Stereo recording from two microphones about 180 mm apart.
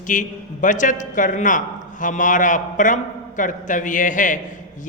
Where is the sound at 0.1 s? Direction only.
45° left (ahead or behind).